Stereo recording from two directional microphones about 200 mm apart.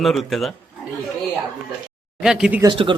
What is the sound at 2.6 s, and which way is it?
Speech, 25° right (ahead or behind).